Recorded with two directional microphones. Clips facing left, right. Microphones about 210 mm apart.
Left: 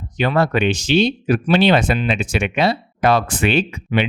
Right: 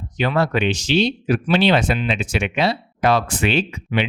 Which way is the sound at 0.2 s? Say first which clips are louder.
Left 2 dB; 50° left (ahead or behind).